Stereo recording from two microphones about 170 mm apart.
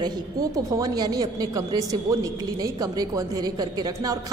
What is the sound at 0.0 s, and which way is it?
A woman's voice, 20° right (ahead or behind).